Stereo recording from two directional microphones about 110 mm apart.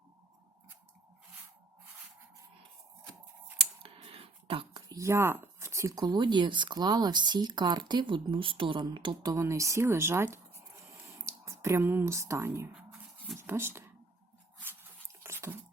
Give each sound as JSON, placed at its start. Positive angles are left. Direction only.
{"t": 3.9, "sound": "a sound", "side_deg": -60}
{"t": 4.7, "sound": "speech", "side_deg": -35}
{"t": 9.3, "sound": "speech", "side_deg": -25}
{"t": 12.7, "sound": "a sound", "side_deg": 0}
{"t": 13.5, "sound": "speech", "side_deg": -20}
{"t": 14.6, "sound": "dog", "side_deg": -25}